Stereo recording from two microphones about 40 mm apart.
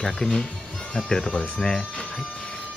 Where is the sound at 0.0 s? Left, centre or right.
Centre.